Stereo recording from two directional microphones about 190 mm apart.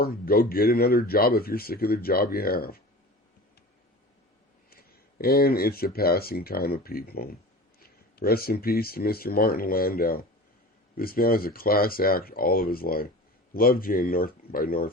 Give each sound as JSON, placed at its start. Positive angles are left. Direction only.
{"t": 0.0, "sound": "speech", "side_deg": 50}
{"t": 4.7, "sound": "speech", "side_deg": 50}